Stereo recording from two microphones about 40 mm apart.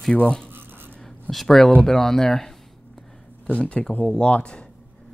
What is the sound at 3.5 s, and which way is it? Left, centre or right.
Speech, left.